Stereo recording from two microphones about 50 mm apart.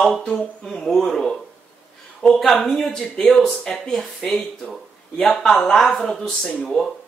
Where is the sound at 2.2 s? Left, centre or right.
Left.